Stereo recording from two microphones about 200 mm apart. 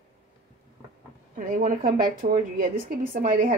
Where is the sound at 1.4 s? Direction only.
40° right (ahead or behind).